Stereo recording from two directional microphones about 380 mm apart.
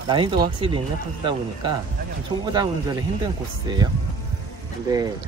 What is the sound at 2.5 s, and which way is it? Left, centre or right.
Speech, centre.